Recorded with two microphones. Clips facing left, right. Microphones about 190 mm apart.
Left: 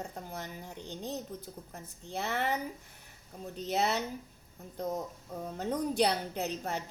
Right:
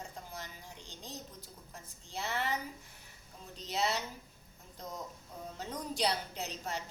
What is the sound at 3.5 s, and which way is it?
A woman's voice, 55° left (ahead or behind).